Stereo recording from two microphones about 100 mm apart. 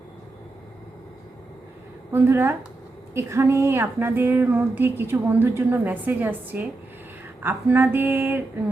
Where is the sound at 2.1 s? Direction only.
25° right (ahead or behind).